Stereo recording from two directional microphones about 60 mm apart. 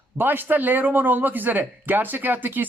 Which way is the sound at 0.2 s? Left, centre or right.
Right.